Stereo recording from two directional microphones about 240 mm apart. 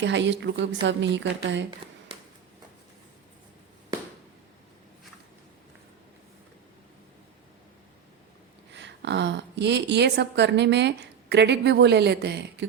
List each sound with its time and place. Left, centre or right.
0.0 s a woman's voice: right
2.1 s a sound: right
8.7 s a woman's voice: right